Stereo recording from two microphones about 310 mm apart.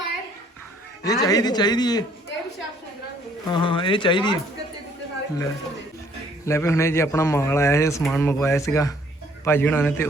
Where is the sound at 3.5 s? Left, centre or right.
Centre.